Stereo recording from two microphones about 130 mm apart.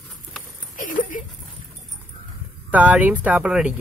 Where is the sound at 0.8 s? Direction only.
90° left.